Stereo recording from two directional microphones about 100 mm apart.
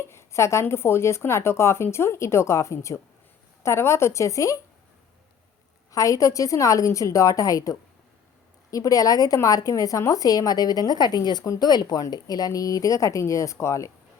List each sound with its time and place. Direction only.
0.1 s speech: 25° left (ahead or behind)
5.9 s speech: 35° left (ahead or behind)